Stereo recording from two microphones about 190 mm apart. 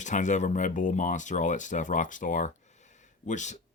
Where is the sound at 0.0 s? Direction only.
40° left (ahead or behind).